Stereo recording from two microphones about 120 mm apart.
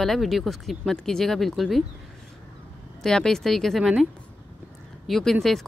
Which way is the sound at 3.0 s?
5° left (ahead or behind).